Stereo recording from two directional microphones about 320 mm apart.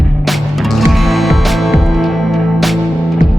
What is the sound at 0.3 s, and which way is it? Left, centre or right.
Music, centre.